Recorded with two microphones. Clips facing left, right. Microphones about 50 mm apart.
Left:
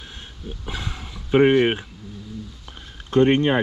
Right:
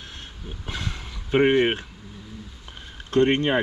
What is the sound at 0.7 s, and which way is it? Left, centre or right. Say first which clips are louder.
Speech: even; centre.